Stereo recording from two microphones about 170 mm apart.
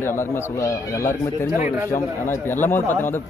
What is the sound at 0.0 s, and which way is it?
Speech, 15° left (ahead or behind).